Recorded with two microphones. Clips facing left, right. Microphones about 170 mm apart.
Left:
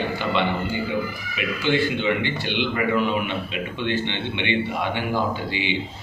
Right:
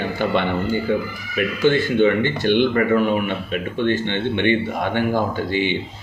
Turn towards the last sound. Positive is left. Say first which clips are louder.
# right 5 dB
turn(degrees=-50)  # may be behind; listen again after turning